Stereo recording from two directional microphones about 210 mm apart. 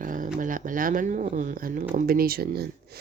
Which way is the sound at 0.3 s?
40° right (ahead or behind).